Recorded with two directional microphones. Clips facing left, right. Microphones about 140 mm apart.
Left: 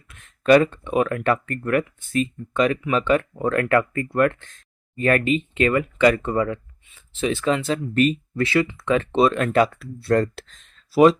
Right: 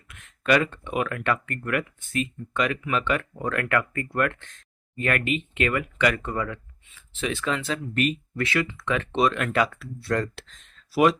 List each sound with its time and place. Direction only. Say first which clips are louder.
0.1 s speech: left 7 dB; 35° left (ahead or behind)